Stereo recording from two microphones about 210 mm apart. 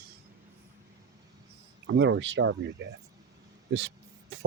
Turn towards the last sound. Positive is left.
turn(degrees=-60)  # may be behind; listen again after turning